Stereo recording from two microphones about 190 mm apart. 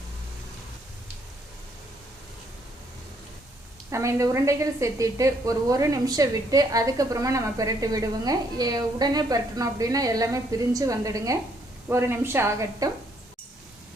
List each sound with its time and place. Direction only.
3.8 s a woman's voice: 15° right (ahead or behind)